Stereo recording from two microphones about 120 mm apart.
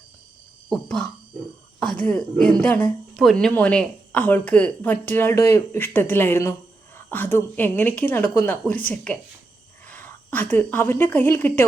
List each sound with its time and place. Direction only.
0.7 s a woman's voice: 5° left (ahead or behind)